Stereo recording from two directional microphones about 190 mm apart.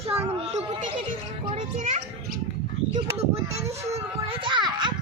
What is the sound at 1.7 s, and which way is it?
Speech, 40° right (ahead or behind).